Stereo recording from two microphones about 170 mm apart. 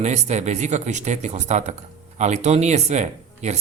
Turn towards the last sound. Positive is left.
turn(degrees=-40)  # may be behind; listen again after turning